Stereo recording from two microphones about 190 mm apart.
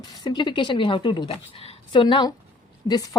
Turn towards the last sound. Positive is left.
turn(degrees=20)  # may be behind; listen again after turning